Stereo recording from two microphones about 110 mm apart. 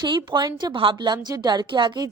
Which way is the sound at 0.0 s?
45° right (ahead or behind).